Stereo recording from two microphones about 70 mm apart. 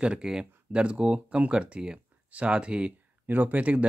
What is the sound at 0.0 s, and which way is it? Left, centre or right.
Speech, centre.